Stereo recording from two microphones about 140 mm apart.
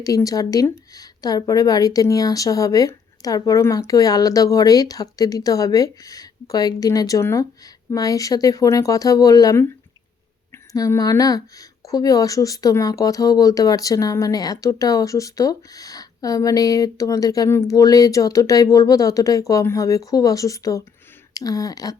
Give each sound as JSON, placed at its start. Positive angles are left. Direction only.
{"t": 0.0, "sound": "speech", "side_deg": 25}